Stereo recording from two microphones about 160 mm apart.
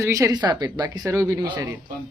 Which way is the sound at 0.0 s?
20° right (ahead or behind).